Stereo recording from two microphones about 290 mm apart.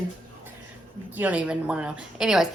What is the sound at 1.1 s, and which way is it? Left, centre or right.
A woman's voice, centre.